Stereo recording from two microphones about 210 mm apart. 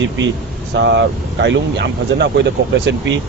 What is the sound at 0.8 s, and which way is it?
Speech, 60° right (ahead or behind).